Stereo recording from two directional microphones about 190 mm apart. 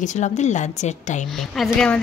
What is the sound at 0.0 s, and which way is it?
Speech, 40° left (ahead or behind).